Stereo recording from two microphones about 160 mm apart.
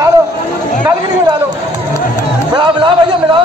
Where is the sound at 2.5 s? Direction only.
30° right (ahead or behind).